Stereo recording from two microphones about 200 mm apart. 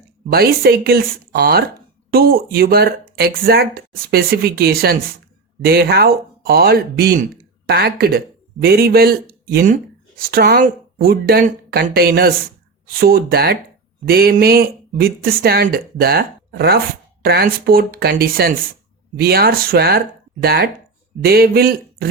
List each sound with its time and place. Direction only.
0.3 s speech: 50° right (ahead or behind)